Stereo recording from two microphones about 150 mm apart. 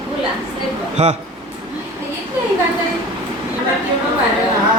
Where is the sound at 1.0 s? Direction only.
45° right (ahead or behind).